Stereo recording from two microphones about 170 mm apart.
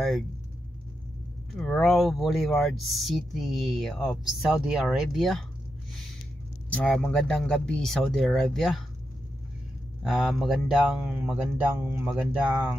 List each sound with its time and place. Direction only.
1.6 s speech: 5° left (ahead or behind)
6.7 s speech: 5° left (ahead or behind)
10.0 s speech: 5° right (ahead or behind)